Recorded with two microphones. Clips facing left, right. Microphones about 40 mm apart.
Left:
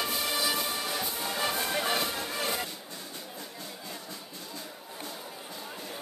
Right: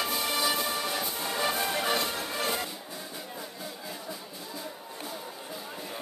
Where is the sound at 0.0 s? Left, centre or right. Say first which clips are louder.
Right 1 dB; centre.